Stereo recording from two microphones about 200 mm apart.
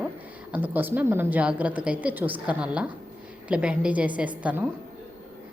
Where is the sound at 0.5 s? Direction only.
10° right (ahead or behind).